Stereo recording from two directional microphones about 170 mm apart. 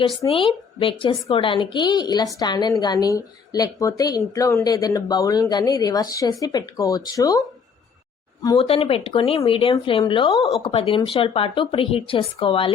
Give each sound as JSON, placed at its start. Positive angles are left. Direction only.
{"t": 0.3, "sound": "speech", "side_deg": 30}
{"t": 8.5, "sound": "speech", "side_deg": 35}